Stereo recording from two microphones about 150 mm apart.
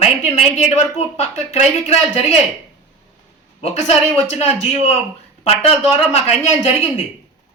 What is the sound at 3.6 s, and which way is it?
Speech, 45° left (ahead or behind).